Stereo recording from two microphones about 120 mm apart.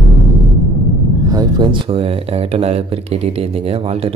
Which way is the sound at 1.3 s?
35° right (ahead or behind).